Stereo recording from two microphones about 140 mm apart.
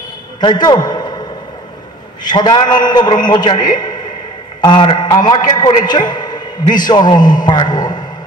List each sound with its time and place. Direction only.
0.4 s a man's voice: 30° left (ahead or behind)
2.2 s a man's voice: 30° left (ahead or behind)